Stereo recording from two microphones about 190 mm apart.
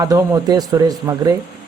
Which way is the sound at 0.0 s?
20° right (ahead or behind).